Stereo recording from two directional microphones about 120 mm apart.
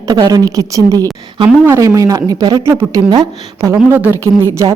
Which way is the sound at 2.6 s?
20° right (ahead or behind).